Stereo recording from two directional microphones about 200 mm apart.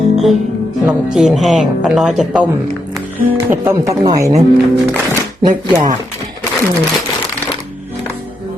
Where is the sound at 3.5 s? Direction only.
15° right (ahead or behind).